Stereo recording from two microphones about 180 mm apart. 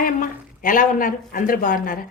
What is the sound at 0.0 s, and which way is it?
A woman's voice, 50° left (ahead or behind).